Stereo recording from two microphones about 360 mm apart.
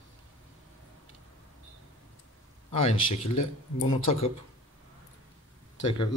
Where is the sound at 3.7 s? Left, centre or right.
Centre.